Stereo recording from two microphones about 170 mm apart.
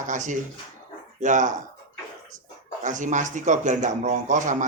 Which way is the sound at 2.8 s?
50° right (ahead or behind).